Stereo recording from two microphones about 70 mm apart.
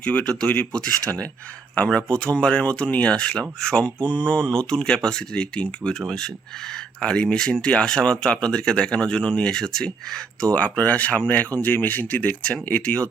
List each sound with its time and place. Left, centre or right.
0.0 s speech: centre